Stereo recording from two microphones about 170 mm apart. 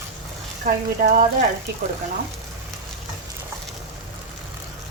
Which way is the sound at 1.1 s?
45° right (ahead or behind).